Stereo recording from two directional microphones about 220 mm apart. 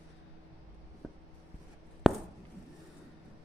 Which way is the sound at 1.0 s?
Centre (ahead or behind).